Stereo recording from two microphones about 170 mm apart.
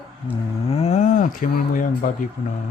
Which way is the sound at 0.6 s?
35° left (ahead or behind).